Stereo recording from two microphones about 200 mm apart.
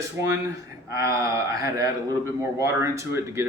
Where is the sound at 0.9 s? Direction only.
15° right (ahead or behind).